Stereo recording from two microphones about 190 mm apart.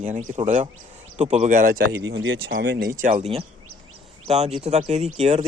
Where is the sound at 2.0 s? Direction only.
75° right (ahead or behind).